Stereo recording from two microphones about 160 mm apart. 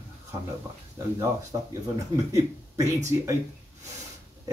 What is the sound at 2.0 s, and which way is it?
Speech, 20° right (ahead or behind).